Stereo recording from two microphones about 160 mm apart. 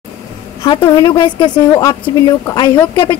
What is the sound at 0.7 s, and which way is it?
A woman's voice, 30° left (ahead or behind).